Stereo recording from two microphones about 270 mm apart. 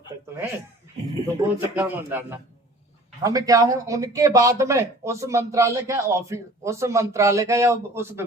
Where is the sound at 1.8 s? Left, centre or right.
Centre.